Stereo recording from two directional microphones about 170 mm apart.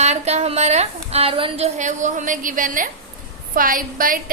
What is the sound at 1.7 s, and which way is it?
A woman's voice, 45° right (ahead or behind).